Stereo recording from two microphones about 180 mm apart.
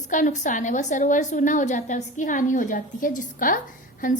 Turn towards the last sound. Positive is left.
turn(degrees=50)  # may be behind; listen again after turning